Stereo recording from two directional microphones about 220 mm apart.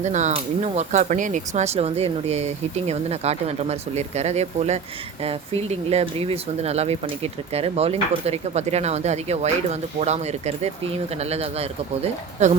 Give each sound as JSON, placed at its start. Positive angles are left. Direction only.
{"t": 0.0, "sound": "speech", "side_deg": -30}